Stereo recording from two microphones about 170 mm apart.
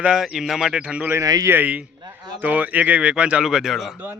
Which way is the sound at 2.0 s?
25° right (ahead or behind).